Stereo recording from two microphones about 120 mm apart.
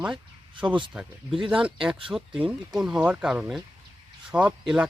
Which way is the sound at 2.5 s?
5° right (ahead or behind).